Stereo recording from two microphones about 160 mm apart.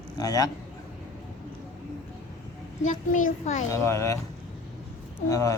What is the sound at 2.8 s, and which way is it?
Speech, 50° left (ahead or behind).